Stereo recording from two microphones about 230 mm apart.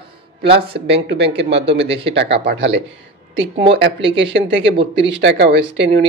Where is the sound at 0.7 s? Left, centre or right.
Right.